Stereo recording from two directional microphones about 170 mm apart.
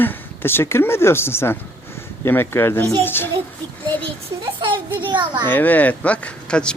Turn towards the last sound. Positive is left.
turn(degrees=5)  # may be behind; listen again after turning